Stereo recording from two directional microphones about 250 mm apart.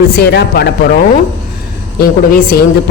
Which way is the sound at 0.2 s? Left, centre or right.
Left.